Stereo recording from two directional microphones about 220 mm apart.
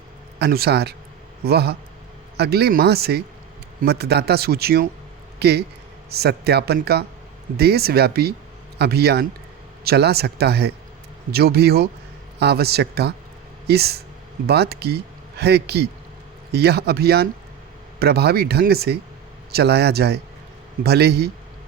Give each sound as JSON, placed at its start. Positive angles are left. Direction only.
{"t": 0.3, "sound": "speech", "side_deg": -45}